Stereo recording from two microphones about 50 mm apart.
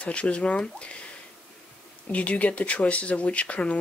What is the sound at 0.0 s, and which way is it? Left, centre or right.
Speech, left.